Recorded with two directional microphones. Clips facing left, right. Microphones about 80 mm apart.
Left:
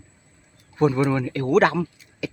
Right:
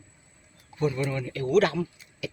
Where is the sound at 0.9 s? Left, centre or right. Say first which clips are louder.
Left 8 dB; left.